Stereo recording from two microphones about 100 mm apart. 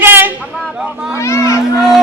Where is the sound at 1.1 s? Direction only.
30° left (ahead or behind).